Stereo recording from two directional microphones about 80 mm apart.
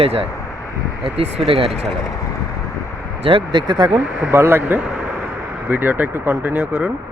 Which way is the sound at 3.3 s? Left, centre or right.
Right.